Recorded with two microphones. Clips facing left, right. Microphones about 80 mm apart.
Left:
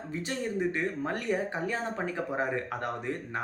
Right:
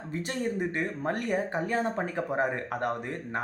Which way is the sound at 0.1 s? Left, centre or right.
Right.